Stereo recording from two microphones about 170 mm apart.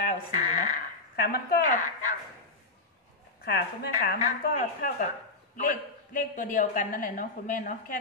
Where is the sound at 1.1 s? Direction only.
65° left (ahead or behind).